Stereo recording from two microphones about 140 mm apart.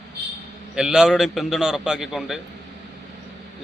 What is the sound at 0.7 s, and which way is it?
A man's voice, 5° right (ahead or behind).